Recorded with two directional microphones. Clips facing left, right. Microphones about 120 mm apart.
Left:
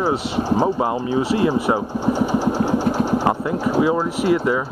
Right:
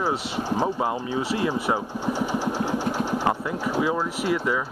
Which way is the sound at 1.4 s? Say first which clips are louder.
Left 6 dB; 30° left (ahead or behind).